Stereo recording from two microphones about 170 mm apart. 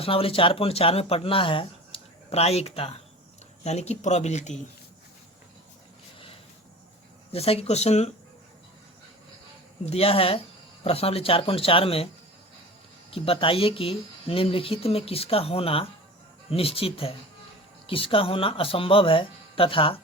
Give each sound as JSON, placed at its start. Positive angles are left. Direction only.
{"t": 0.0, "sound": "speech", "side_deg": 35}
{"t": 7.3, "sound": "speech", "side_deg": 35}
{"t": 9.8, "sound": "speech", "side_deg": 35}
{"t": 13.1, "sound": "speech", "side_deg": 35}